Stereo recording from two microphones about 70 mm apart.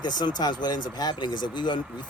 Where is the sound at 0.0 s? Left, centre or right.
Left.